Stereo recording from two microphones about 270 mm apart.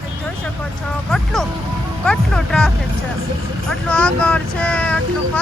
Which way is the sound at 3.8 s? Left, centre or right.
Centre.